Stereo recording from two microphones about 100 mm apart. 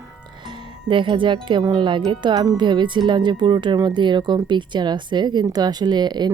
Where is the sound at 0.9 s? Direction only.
55° right (ahead or behind).